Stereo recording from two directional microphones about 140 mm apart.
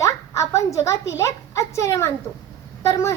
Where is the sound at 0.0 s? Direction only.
20° left (ahead or behind).